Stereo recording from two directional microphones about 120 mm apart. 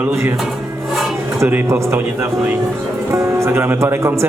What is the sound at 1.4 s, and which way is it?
A man's voice, 20° right (ahead or behind).